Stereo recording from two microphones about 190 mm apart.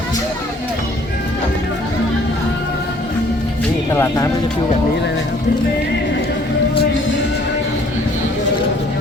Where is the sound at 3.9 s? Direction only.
15° left (ahead or behind).